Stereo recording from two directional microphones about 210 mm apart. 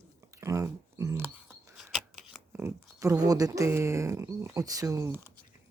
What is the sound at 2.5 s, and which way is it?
Speech, 10° right (ahead or behind).